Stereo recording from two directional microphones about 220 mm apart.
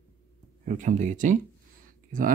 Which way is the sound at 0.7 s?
35° right (ahead or behind).